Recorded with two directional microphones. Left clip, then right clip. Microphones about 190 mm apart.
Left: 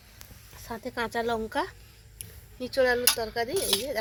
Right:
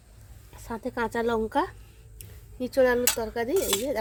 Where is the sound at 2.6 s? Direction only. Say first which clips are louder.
Right 2 dB; 65° right (ahead or behind).